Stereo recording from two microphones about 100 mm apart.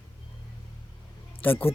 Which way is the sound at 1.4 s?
20° left (ahead or behind).